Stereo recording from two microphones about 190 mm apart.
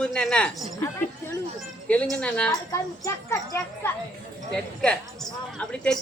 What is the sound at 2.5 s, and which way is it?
Speech, 15° left (ahead or behind).